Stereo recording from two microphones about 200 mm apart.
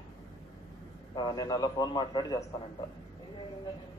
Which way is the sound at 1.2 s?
20° left (ahead or behind).